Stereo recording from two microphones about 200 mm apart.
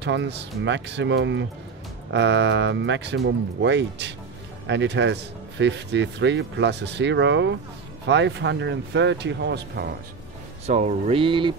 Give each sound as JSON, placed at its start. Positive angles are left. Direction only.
{"t": 0.0, "sound": "speech", "side_deg": -60}
{"t": 10.7, "sound": "speech", "side_deg": -35}